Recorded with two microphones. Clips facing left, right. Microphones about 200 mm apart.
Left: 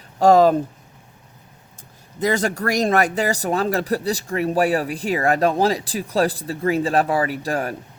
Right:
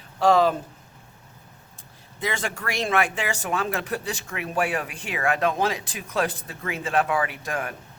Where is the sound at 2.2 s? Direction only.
40° left (ahead or behind).